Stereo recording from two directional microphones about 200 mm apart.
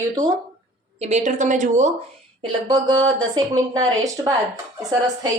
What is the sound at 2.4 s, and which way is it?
A woman's voice, 20° right (ahead or behind).